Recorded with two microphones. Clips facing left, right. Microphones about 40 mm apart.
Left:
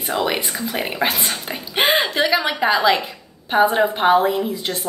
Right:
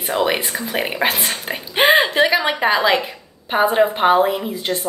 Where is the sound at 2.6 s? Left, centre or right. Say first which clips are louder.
Left 1 dB; centre.